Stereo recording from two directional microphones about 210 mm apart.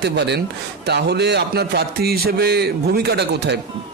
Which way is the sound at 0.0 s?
55° right (ahead or behind).